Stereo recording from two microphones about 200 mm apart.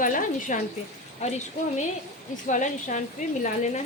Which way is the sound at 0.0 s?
40° left (ahead or behind).